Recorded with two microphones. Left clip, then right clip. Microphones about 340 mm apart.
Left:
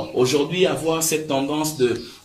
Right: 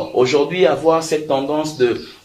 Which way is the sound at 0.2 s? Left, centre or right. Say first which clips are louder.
Right 5 dB; centre.